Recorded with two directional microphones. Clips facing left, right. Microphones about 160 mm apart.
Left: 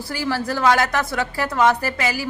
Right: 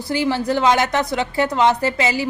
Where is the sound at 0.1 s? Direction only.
20° right (ahead or behind).